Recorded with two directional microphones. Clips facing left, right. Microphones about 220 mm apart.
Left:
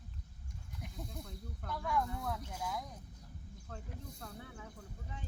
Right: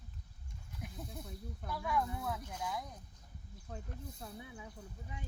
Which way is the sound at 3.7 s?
15° right (ahead or behind).